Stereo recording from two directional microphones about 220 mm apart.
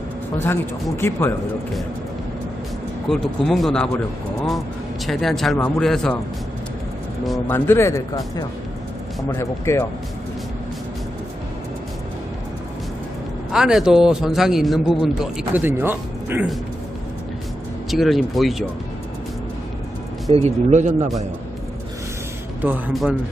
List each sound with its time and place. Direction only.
0.3 s speech: 10° left (ahead or behind)
3.1 s speech: centre (ahead or behind)
5.0 s speech: centre (ahead or behind)
7.3 s speech: 5° left (ahead or behind)
13.5 s speech: centre (ahead or behind)
17.9 s speech: centre (ahead or behind)
20.3 s speech: 30° right (ahead or behind)
22.6 s speech: 5° right (ahead or behind)